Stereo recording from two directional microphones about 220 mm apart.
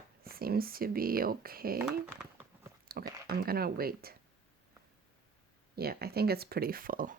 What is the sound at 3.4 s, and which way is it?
Speech, 45° right (ahead or behind).